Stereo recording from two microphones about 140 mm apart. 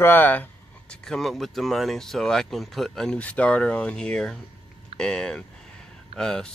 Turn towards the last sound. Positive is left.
turn(degrees=5)  # may be behind; listen again after turning